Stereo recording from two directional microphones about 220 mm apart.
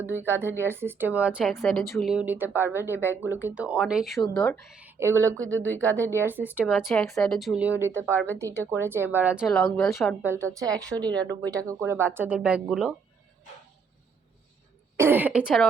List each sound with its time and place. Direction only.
0.0 s a woman's voice: 10° right (ahead or behind)
4.8 s a woman's voice: 10° right (ahead or behind)
8.1 s speech: 10° left (ahead or behind)
8.4 s a woman's voice: 15° right (ahead or behind); by 10.2 s 5° left (ahead or behind)
10.2 s a woman's voice: 10° right (ahead or behind)
14.9 s a woman's voice: 10° right (ahead or behind)